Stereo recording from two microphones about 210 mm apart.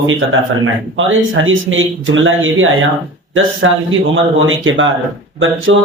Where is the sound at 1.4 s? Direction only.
65° right (ahead or behind).